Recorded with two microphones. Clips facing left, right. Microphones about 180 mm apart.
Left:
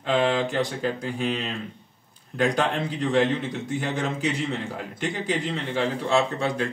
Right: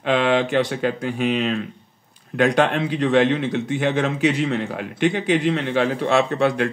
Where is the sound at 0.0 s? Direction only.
75° right (ahead or behind).